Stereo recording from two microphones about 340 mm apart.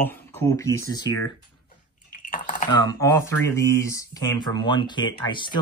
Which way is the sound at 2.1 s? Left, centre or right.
Left.